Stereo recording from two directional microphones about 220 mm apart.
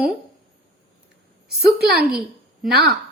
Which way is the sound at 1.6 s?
45° right (ahead or behind).